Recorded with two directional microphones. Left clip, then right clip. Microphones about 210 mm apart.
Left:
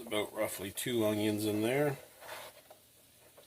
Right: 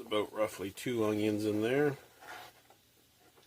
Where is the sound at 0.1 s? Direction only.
45° right (ahead or behind).